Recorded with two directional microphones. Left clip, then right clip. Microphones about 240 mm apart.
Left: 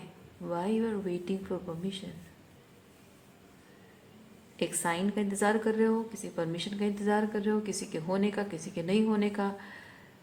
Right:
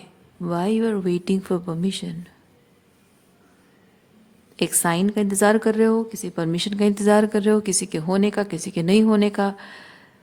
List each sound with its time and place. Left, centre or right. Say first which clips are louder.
0.4 s a woman's voice: right 9 dB; right
4.5 s a woman's voice: right 9 dB; right